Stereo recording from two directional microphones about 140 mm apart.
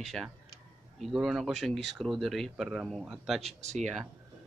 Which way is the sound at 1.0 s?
Centre (ahead or behind).